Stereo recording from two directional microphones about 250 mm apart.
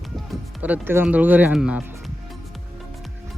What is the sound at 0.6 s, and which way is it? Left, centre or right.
Speech, centre.